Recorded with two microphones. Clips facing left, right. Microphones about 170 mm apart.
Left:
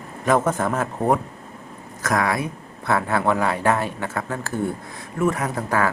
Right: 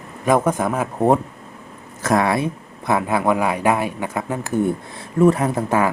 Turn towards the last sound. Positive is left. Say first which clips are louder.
# right 4 dB
turn(degrees=-20)  # may be behind; listen again after turning